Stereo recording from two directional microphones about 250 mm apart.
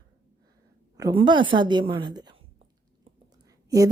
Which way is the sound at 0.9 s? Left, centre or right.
Centre.